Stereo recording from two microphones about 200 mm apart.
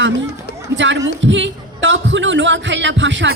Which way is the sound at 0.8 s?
65° right (ahead or behind).